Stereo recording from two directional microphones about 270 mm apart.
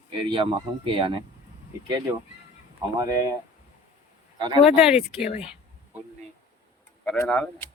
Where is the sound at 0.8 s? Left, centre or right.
Centre.